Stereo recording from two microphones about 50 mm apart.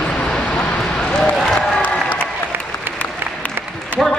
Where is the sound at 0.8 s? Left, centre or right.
Centre.